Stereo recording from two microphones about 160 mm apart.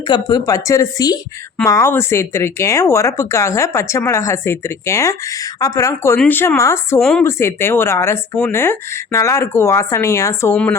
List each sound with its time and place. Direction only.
0.1 s a woman's voice: 25° left (ahead or behind)
7.0 s a woman's voice: centre (ahead or behind)
7.3 s speech: 15° left (ahead or behind)